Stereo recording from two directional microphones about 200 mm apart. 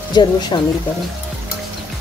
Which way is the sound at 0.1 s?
20° left (ahead or behind).